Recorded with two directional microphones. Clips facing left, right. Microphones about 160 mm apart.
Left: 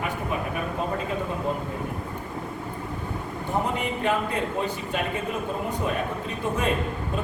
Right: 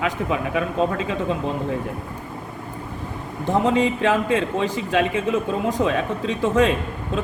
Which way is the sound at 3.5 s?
90° right.